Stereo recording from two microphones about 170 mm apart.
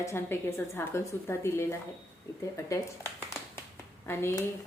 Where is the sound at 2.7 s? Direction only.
15° left (ahead or behind).